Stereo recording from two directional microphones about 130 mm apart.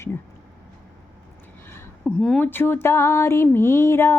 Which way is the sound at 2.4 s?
15° left (ahead or behind).